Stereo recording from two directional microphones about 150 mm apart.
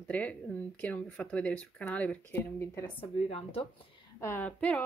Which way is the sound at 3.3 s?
40° left (ahead or behind).